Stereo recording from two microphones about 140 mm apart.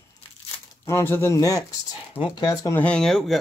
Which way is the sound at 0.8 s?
15° left (ahead or behind).